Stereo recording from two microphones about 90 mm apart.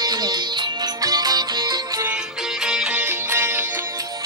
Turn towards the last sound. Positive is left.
turn(degrees=-10)  # may be behind; listen again after turning